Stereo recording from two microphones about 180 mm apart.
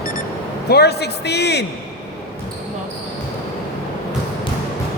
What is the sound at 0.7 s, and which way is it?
Speech, 65° left (ahead or behind).